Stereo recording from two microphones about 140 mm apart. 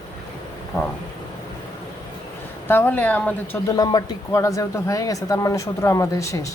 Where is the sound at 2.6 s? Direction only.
15° left (ahead or behind).